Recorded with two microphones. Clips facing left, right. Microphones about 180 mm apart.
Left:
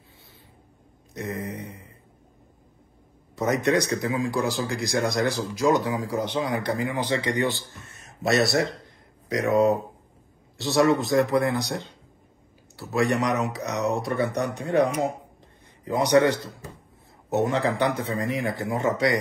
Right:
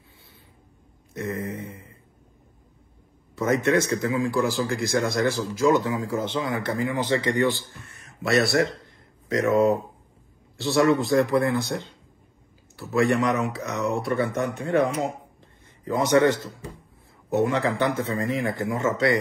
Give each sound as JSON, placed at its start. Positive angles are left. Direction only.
{"t": 1.1, "sound": "mantra", "side_deg": 20}
{"t": 3.6, "sound": "a man's voice", "side_deg": 15}
{"t": 8.8, "sound": "a sound", "side_deg": 15}
{"t": 10.6, "sound": "speech", "side_deg": 20}
{"t": 12.9, "sound": "a man's voice", "side_deg": 20}